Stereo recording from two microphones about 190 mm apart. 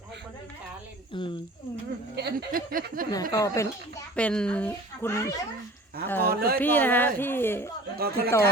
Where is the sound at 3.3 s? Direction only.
15° left (ahead or behind).